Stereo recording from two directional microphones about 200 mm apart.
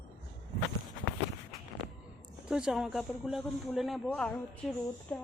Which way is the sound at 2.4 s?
5° right (ahead or behind).